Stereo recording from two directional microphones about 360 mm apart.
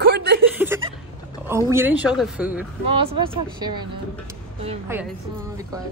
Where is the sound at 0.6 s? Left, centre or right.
Centre.